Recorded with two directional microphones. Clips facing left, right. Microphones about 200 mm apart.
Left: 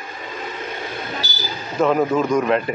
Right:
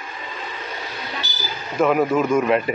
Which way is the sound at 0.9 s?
50° left (ahead or behind).